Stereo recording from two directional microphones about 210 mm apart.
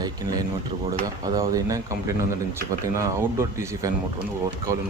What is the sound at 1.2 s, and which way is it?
Speech, 15° right (ahead or behind).